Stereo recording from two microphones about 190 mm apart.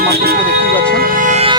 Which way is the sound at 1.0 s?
45° right (ahead or behind).